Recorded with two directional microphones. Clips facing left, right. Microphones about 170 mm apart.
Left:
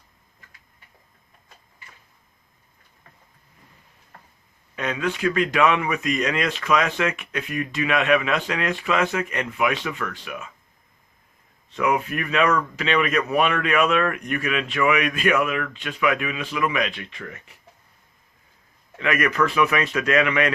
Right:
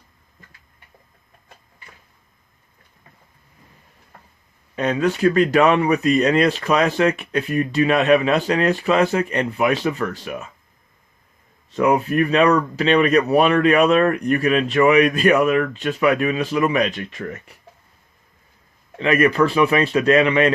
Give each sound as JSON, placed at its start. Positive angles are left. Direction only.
{"t": 4.7, "sound": "speech", "side_deg": -35}
{"t": 11.7, "sound": "speech", "side_deg": -35}
{"t": 18.9, "sound": "speech", "side_deg": -30}